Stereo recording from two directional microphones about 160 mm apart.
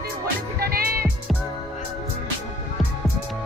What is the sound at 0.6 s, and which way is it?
Music, 70° right (ahead or behind).